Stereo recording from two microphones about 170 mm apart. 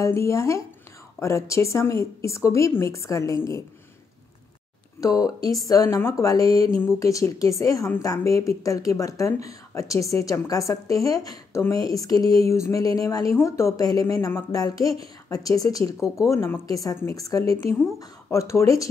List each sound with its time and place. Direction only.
0.0 s a woman's voice: 15° left (ahead or behind)
5.0 s a woman's voice: 20° left (ahead or behind)